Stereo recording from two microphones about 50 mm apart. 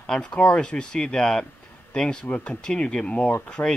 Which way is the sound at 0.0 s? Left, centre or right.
Centre.